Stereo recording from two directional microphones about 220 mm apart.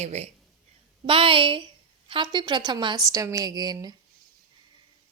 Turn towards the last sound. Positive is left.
turn(degrees=-15)  # may be behind; listen again after turning